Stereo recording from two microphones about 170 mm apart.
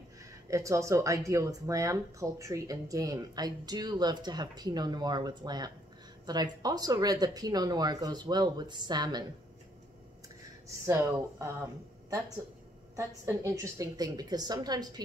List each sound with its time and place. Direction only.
0.2 s speech: 20° right (ahead or behind)
10.9 s speech: 20° right (ahead or behind)